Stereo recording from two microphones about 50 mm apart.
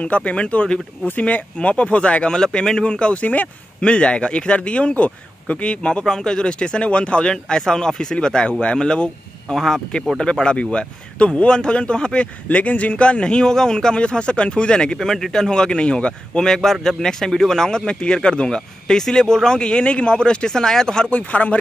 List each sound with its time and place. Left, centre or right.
0.0 s a man's voice: left
15.0 s speech: centre
21.1 s a man's voice: left